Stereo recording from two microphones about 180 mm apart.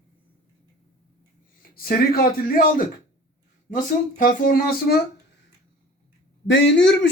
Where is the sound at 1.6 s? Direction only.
55° left (ahead or behind).